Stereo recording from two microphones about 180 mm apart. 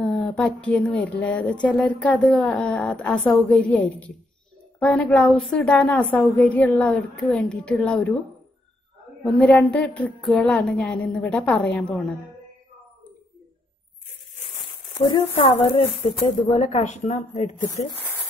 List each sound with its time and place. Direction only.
0.0 s a woman's voice: centre (ahead or behind)
9.2 s a woman's voice: centre (ahead or behind)
15.0 s speech: 25° left (ahead or behind)
16.5 s a woman's voice: 40° left (ahead or behind)